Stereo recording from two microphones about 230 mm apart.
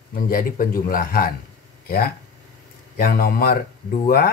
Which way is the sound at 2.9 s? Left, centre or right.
Left.